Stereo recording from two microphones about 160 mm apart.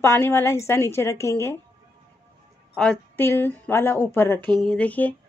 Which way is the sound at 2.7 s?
10° left (ahead or behind).